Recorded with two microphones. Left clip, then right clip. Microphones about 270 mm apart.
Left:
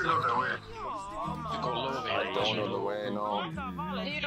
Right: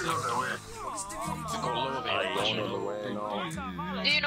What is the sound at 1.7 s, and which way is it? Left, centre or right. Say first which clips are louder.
Speech: right 2 dB; centre.